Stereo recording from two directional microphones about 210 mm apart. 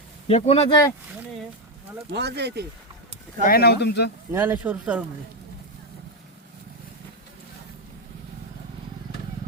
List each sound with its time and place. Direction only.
0.3 s speech: 30° left (ahead or behind)
2.0 s speech: 55° right (ahead or behind)
3.4 s speech: 45° left (ahead or behind)
4.3 s speech: 10° right (ahead or behind)